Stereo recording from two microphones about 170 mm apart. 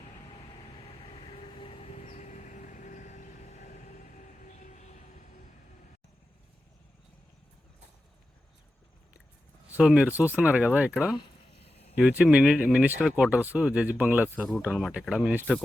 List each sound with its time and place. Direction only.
1.0 s vehicle: 35° left (ahead or behind)
4.4 s train: 45° left (ahead or behind)
9.7 s speech: 5° right (ahead or behind)
11.6 s a sound: 35° left (ahead or behind)
11.9 s speech: 5° right (ahead or behind)